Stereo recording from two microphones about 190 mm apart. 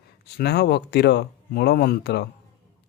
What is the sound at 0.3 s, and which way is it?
Speech, 60° left (ahead or behind).